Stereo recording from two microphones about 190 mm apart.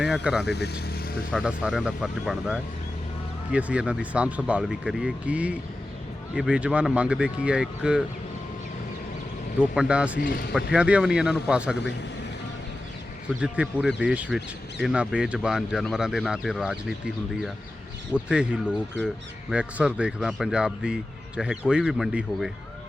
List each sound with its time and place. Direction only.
0.0 s speech: 5° right (ahead or behind)
0.4 s speech: 60° left (ahead or behind)
1.3 s speech: centre (ahead or behind)
9.7 s speech: 5° right (ahead or behind)
10.2 s speech: 60° left (ahead or behind)
10.7 s speech: 5° right (ahead or behind)
13.4 s speech: 5° right (ahead or behind)
18.1 s speech: 5° right (ahead or behind)